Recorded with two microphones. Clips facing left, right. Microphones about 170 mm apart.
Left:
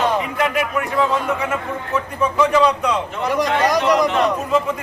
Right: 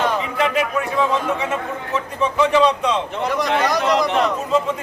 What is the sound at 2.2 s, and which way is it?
Speech, 25° right (ahead or behind).